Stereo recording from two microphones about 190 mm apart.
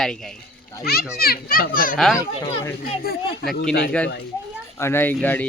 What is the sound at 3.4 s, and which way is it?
Speech, 55° left (ahead or behind).